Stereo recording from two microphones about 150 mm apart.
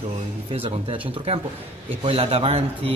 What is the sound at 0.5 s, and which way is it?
A man's voice, 40° right (ahead or behind).